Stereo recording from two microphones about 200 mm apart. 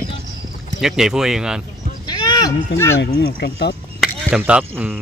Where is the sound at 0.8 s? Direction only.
5° right (ahead or behind).